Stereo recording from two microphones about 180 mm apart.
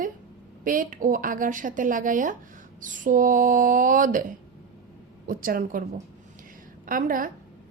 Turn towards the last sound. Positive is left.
turn(degrees=-50)  # may be behind; listen again after turning